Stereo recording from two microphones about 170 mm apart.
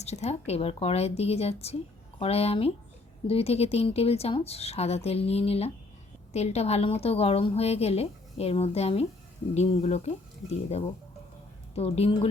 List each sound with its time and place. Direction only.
0.0 s a woman's voice: 40° left (ahead or behind)